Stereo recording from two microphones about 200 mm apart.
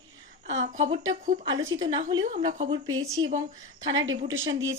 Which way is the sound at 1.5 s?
75° right (ahead or behind).